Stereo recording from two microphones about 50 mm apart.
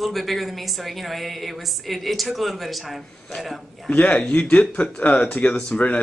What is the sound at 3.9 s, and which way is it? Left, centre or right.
Speech, left.